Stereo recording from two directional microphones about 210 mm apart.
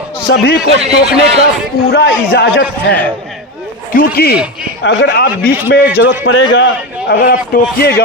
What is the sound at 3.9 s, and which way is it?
Speech, 45° left (ahead or behind).